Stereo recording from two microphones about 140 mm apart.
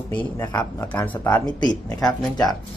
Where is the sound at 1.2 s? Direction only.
20° left (ahead or behind).